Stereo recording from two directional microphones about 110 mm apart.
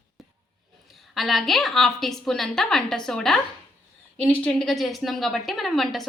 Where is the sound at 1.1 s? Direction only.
Centre (ahead or behind).